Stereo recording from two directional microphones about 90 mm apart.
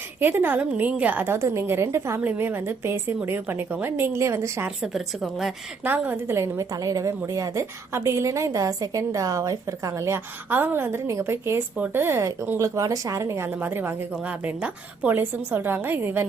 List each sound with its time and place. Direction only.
0.2 s a woman's voice: 20° right (ahead or behind)
4.8 s a woman's voice: 5° right (ahead or behind)
5.8 s a woman's voice: 20° right (ahead or behind)
10.5 s a woman's voice: 25° right (ahead or behind)
13.5 s a woman's voice: 20° right (ahead or behind)